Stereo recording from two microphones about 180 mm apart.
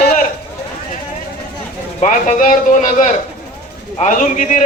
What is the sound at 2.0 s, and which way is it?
A man's voice, 45° left (ahead or behind).